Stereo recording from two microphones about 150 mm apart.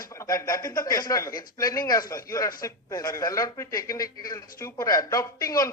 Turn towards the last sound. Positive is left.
turn(degrees=25)  # may be behind; listen again after turning